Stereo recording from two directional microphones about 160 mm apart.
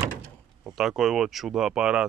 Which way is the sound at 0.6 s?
Centre (ahead or behind).